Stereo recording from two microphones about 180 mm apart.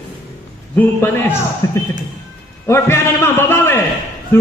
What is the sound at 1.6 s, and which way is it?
A man's voice, 20° left (ahead or behind).